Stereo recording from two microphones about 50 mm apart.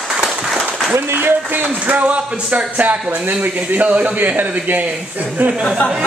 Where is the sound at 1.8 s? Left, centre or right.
Right.